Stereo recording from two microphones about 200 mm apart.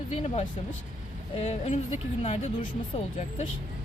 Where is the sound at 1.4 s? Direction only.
30° left (ahead or behind).